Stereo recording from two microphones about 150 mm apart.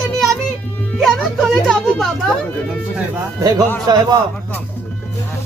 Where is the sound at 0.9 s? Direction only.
Centre (ahead or behind).